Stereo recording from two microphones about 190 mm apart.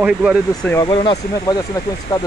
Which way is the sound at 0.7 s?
15° left (ahead or behind).